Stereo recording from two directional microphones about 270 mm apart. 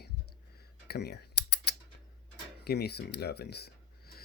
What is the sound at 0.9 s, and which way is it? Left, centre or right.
Typing, left.